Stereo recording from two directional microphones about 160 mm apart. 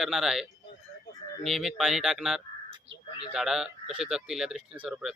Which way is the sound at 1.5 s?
Centre (ahead or behind).